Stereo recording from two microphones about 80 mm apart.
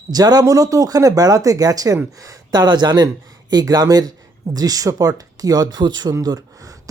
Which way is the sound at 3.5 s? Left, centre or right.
Right.